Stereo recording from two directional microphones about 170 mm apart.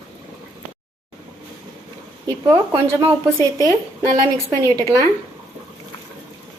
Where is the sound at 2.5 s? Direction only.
30° right (ahead or behind).